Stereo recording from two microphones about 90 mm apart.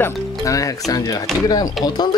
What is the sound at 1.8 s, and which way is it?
Speech, centre (ahead or behind).